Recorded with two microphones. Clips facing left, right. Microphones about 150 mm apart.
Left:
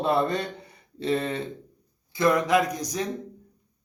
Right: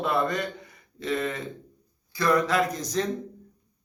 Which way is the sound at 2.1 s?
20° left (ahead or behind).